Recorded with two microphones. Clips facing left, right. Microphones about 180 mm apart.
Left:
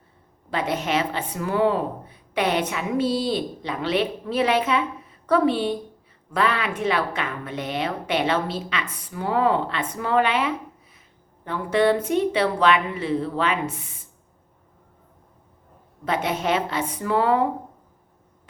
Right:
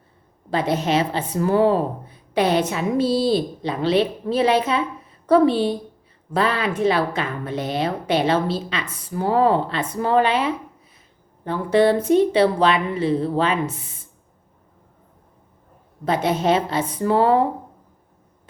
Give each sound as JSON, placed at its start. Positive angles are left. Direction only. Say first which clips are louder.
{"t": 0.5, "sound": "a woman's voice", "louder": "right 4 dB", "side_deg": -35}
{"t": 16.0, "sound": "a woman's voice", "louder": "right 4 dB", "side_deg": -35}